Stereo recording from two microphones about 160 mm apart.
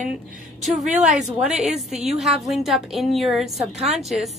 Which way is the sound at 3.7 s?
40° right (ahead or behind).